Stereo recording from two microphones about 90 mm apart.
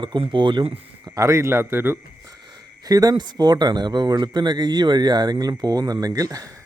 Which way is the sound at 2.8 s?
45° right (ahead or behind).